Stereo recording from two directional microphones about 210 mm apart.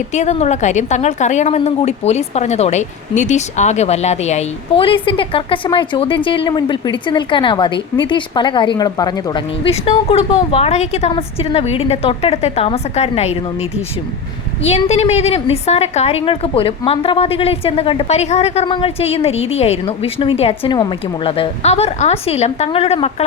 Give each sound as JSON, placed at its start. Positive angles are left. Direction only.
{"t": 0.1, "sound": "a woman's voice", "side_deg": 35}
{"t": 14.7, "sound": "a woman's voice", "side_deg": 30}